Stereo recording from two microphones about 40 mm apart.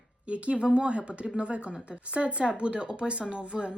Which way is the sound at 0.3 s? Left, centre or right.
Right.